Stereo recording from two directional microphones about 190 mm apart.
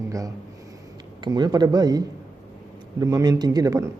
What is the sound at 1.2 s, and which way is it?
Speech, 20° right (ahead or behind).